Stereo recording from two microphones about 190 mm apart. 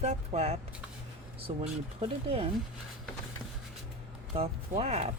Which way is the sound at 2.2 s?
30° right (ahead or behind).